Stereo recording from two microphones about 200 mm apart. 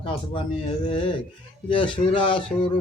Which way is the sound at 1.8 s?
25° left (ahead or behind).